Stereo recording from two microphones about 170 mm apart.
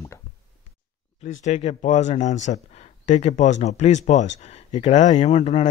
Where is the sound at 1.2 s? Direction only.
45° left (ahead or behind).